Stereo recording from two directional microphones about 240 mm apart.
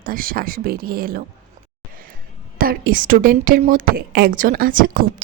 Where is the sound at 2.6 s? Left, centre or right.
Right.